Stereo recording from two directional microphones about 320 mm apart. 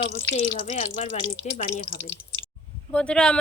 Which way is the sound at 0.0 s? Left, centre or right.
Left.